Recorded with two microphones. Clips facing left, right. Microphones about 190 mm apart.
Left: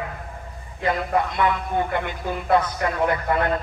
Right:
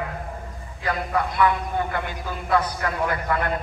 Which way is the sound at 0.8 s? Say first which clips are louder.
Left 3 dB; 20° left (ahead or behind).